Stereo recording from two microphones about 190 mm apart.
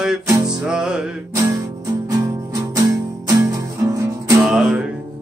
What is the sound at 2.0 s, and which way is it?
Music, 15° right (ahead or behind).